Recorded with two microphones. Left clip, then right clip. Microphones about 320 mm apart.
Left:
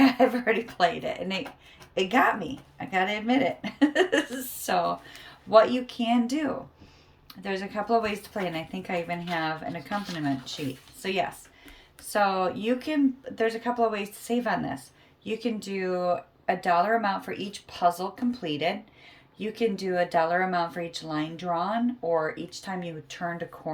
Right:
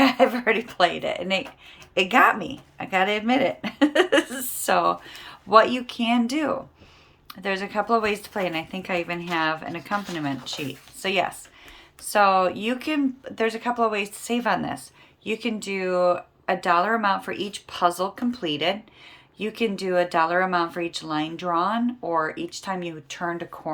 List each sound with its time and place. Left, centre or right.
0.0 s speech: centre